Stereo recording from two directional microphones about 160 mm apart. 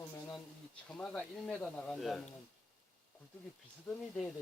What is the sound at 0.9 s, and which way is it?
Speech, 5° left (ahead or behind).